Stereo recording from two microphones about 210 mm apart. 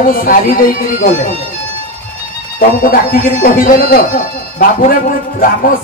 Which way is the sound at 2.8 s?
40° left (ahead or behind).